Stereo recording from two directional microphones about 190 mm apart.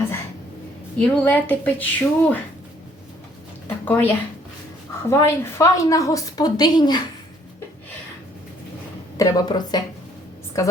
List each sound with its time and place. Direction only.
0.9 s a woman's voice: 10° left (ahead or behind)
3.8 s a woman's voice: 10° left (ahead or behind)
9.1 s a woman's voice: 20° left (ahead or behind)